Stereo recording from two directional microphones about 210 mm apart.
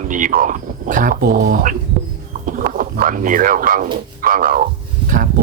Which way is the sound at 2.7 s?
40° right (ahead or behind).